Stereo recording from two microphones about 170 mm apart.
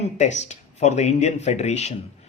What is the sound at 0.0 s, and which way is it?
Speech, 40° left (ahead or behind).